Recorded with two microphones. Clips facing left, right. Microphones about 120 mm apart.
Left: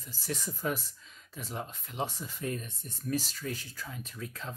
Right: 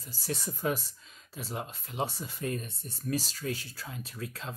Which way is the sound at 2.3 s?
60° right (ahead or behind).